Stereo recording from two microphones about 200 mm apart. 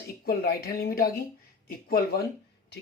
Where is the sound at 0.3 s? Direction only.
50° left (ahead or behind).